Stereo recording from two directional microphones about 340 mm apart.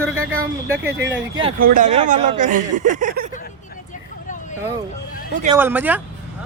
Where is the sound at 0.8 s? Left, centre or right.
Right.